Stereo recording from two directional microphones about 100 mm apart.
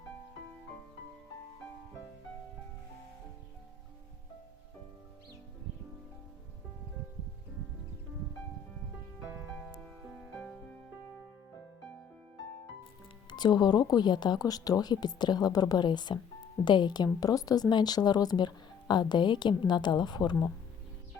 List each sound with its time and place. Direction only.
10.3 s music: 10° left (ahead or behind)
13.3 s speech: 45° left (ahead or behind)